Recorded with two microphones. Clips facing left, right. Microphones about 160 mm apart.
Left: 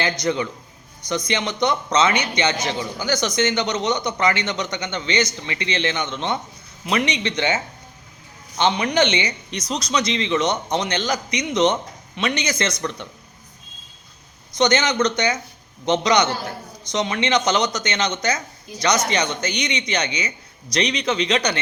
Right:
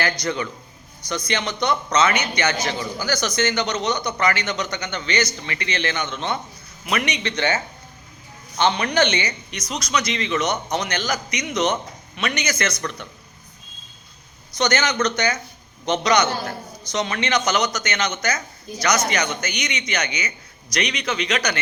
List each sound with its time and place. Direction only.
0.0 s a man's voice: 20° left (ahead or behind)
9.5 s a man's voice: 30° left (ahead or behind)
14.6 s a man's voice: 20° left (ahead or behind)